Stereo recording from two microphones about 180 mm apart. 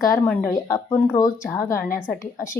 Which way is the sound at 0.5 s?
20° left (ahead or behind).